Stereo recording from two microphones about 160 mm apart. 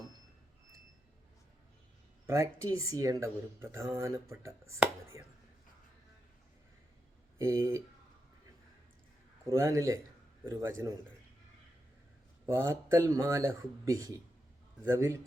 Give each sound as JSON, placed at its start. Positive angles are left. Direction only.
{"t": 2.2, "sound": "speech", "side_deg": -20}
{"t": 7.3, "sound": "speech", "side_deg": -20}
{"t": 9.5, "sound": "a man's voice", "side_deg": -20}
{"t": 12.5, "sound": "speech", "side_deg": -15}